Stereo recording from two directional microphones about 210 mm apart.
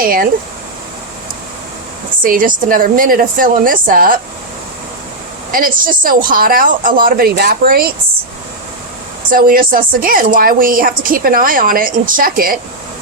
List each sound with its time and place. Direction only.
0.0 s speech: 45° right (ahead or behind)
2.2 s speech: 40° right (ahead or behind)
5.5 s speech: 40° right (ahead or behind)
9.3 s speech: 40° right (ahead or behind)